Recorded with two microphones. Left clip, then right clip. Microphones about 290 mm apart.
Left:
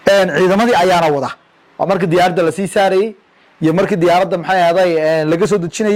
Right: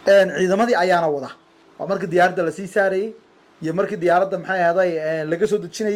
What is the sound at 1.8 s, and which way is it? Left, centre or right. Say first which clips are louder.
A man's voice: left 5 dB; left.